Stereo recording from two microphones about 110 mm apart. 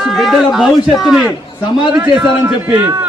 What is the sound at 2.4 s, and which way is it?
Speech, 15° right (ahead or behind).